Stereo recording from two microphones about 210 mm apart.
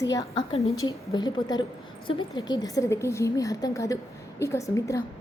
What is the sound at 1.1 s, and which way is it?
A woman's voice, 20° left (ahead or behind).